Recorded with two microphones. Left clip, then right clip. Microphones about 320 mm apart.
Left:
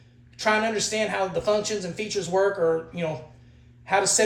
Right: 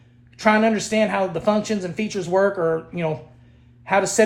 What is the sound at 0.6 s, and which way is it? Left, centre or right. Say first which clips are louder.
Speech: right 5 dB; right.